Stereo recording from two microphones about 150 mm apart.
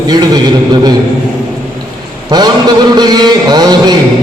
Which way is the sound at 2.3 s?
25° right (ahead or behind).